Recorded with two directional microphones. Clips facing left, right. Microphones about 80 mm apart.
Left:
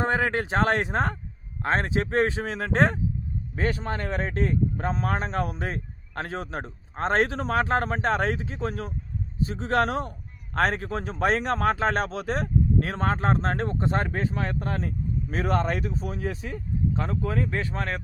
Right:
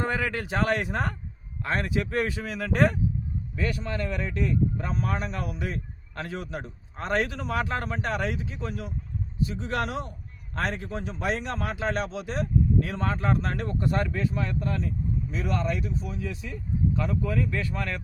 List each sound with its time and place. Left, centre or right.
0.0 s speech: left